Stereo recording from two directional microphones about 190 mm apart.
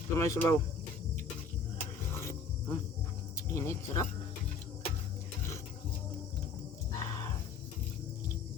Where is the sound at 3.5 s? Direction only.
15° left (ahead or behind).